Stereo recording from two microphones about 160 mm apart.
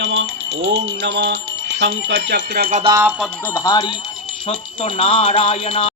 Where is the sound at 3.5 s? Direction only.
20° left (ahead or behind).